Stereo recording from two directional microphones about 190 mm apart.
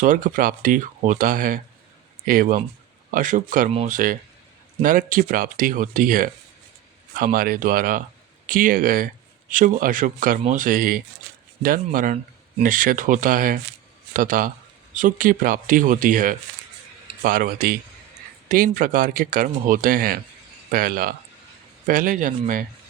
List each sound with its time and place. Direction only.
0.0 s speech: 45° right (ahead or behind)
12.1 s a sound: 35° right (ahead or behind)
12.7 s speech: 45° right (ahead or behind)